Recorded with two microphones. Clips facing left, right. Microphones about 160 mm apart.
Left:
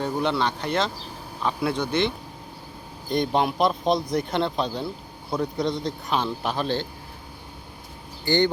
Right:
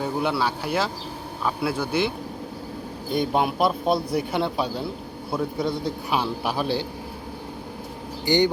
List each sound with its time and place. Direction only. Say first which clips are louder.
0.0 s a man's voice: even; 5° right (ahead or behind)
8.2 s speech: right 1 dB; 15° right (ahead or behind)